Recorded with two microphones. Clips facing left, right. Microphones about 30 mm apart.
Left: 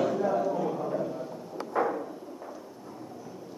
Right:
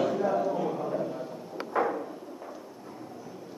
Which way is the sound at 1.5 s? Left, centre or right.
Centre.